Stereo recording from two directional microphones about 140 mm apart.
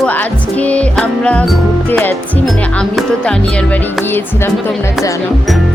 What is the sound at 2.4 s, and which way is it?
Music, 5° left (ahead or behind).